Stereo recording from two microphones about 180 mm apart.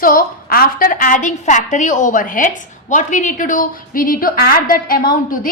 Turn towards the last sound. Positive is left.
turn(degrees=50)  # may be behind; listen again after turning